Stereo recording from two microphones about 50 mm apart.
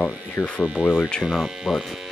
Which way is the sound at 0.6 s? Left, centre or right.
Centre.